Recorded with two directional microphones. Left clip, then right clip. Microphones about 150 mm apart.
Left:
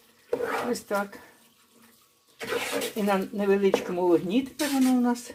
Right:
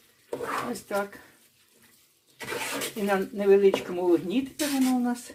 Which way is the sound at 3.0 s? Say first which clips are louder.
Right 3 dB; 30° left (ahead or behind).